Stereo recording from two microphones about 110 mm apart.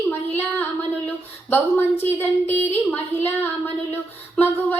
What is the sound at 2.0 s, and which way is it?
Speech, 20° left (ahead or behind).